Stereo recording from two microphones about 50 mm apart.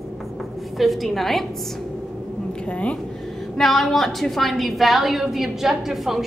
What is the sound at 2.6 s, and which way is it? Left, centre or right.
Speech, left.